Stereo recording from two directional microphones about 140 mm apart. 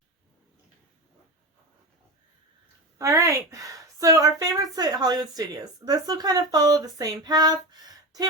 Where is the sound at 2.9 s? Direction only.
20° right (ahead or behind).